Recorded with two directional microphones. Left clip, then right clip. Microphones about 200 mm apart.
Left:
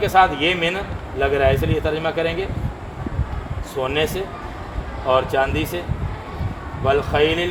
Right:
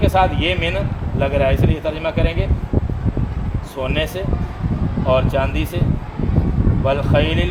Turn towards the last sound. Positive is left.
turn(degrees=-20)  # may be behind; listen again after turning